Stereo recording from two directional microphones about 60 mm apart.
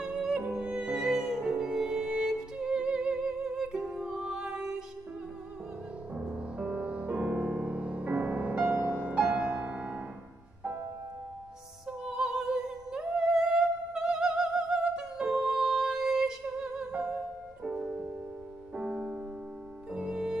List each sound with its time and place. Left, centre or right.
0.0 s music: centre
6.1 s music: centre
8.6 s music: right
8.9 s music: right
9.3 s music: right
12.0 s music: centre
18.8 s music: right
19.9 s music: centre